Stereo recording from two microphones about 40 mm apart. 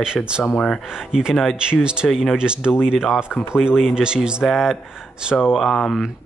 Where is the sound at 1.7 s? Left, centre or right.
Right.